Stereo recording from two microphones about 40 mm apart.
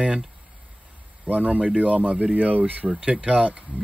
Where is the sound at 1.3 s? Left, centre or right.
Right.